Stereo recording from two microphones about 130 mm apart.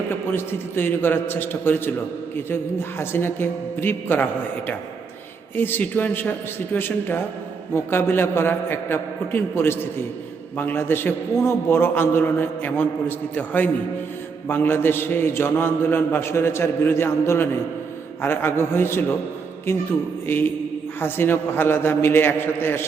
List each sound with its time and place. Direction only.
0.3 s a man's voice: 15° left (ahead or behind)
3.0 s a man's voice: 15° left (ahead or behind)
20.2 s a man's voice: 15° left (ahead or behind)